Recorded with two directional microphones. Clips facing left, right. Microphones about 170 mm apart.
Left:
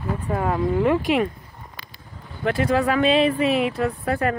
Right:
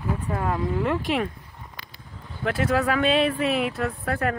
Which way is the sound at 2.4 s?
5° right (ahead or behind).